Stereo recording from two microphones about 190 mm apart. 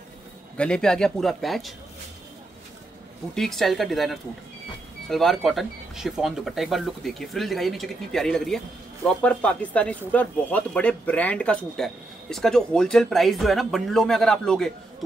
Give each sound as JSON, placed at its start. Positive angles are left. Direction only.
{"t": 0.6, "sound": "speech", "side_deg": 5}
{"t": 3.3, "sound": "speech", "side_deg": 0}